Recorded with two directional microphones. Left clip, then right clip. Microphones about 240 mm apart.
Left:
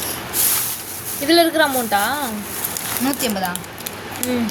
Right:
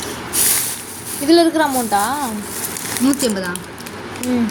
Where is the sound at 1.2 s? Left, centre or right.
Centre.